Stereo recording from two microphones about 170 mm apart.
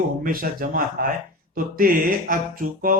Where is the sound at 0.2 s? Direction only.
60° right (ahead or behind).